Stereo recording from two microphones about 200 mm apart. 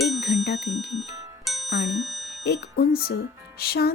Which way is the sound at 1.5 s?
Centre (ahead or behind).